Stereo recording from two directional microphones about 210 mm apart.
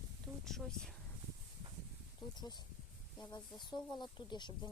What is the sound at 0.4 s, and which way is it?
Speech, centre (ahead or behind).